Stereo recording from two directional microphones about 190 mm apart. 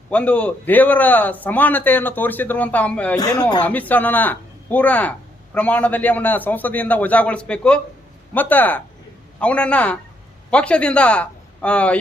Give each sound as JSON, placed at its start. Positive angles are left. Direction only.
{"t": 0.1, "sound": "a man's voice", "side_deg": 5}
{"t": 3.2, "sound": "speech", "side_deg": 20}
{"t": 3.6, "sound": "a man's voice", "side_deg": 10}